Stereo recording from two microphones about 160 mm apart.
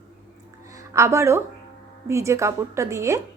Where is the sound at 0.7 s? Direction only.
20° right (ahead or behind).